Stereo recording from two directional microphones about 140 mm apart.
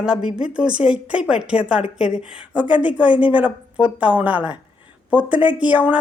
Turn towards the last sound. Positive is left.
turn(degrees=-10)  # may be behind; listen again after turning